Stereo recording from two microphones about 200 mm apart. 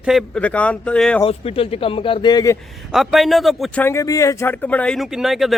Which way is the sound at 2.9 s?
Centre (ahead or behind).